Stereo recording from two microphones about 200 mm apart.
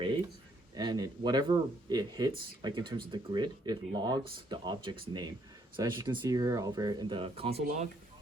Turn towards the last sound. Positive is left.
turn(degrees=-35)  # may be behind; listen again after turning